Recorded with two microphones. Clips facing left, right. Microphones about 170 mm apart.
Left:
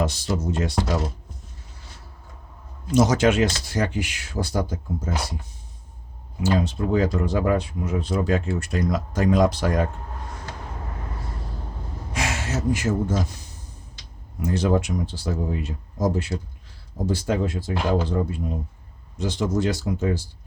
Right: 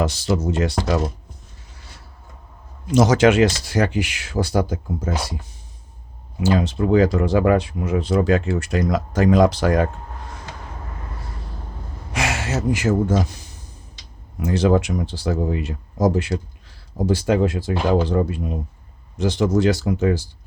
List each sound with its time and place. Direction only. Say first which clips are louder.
0.0 s speech: right 4 dB; 85° right
2.9 s speech: right 4 dB; 85° right
6.4 s speech: right 3 dB; 80° right
12.1 s gasp: right 4 dB; 80° right
14.3 s speech: right 4 dB; 85° right